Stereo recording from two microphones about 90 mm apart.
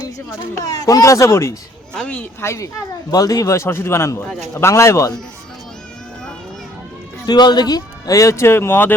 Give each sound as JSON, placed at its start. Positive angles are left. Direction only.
{"t": 0.0, "sound": "speech", "side_deg": 35}
{"t": 1.9, "sound": "speech", "side_deg": 10}
{"t": 2.4, "sound": "speech", "side_deg": 30}
{"t": 3.1, "sound": "speech", "side_deg": 45}
{"t": 7.3, "sound": "speech", "side_deg": 55}